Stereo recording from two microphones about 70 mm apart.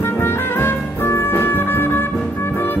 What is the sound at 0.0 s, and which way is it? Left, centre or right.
Music, left.